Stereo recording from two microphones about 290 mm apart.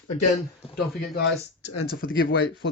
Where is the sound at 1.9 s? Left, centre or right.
Left.